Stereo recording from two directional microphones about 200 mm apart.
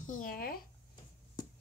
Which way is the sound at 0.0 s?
40° left (ahead or behind).